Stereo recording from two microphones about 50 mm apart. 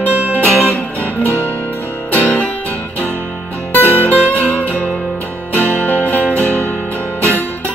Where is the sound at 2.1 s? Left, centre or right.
Left.